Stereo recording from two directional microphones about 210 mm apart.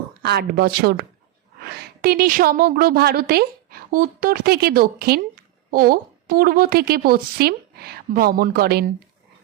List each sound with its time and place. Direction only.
0.2 s a woman's voice: 50° right (ahead or behind)